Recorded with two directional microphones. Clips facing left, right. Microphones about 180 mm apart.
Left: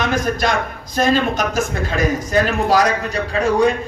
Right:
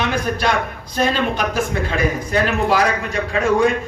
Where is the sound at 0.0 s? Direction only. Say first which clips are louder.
Left 1 dB; 45° left (ahead or behind).